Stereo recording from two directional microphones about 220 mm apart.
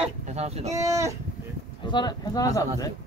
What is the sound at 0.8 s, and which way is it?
Speech, 15° right (ahead or behind).